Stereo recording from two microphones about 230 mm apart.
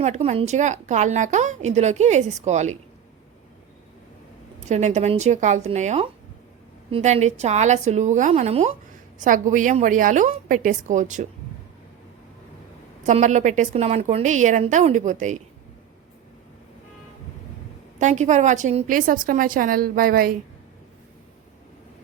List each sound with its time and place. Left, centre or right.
0.0 s a woman's voice: right
4.6 s a woman's voice: right
13.0 s a woman's voice: right
18.0 s a woman's voice: right